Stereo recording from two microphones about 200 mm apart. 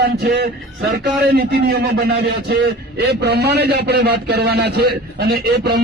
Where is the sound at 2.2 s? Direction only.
55° right (ahead or behind).